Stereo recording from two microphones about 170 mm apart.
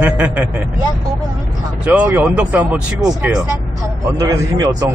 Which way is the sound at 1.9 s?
10° right (ahead or behind).